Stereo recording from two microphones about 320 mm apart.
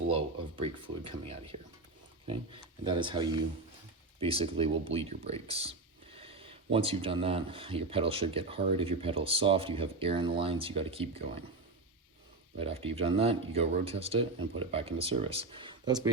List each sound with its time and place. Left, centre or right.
0.1 s speech: centre
12.5 s speech: centre